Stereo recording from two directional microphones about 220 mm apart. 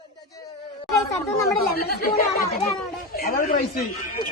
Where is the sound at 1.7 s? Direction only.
45° left (ahead or behind).